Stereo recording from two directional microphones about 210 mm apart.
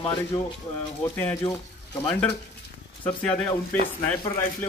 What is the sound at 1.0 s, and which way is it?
Speech, 10° left (ahead or behind).